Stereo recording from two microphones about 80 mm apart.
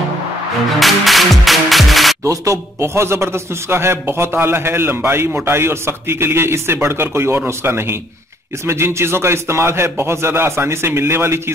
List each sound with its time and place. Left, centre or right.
0.7 s music: centre
2.2 s a man's voice: right